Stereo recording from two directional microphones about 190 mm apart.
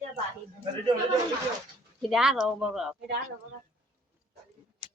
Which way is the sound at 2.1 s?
5° right (ahead or behind).